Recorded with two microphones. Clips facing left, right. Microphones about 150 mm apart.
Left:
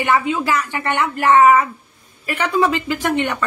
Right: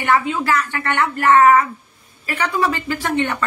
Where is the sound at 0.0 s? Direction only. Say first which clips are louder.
Even; 20° left (ahead or behind).